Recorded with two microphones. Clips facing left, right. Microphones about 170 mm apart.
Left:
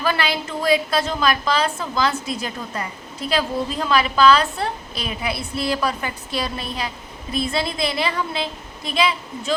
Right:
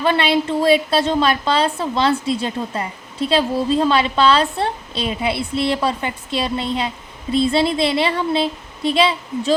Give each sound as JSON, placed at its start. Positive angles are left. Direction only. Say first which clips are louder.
{"t": 0.0, "sound": "a woman's voice", "louder": "right 6 dB", "side_deg": -25}